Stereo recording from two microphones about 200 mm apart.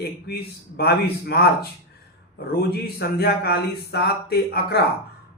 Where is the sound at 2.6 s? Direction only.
50° left (ahead or behind).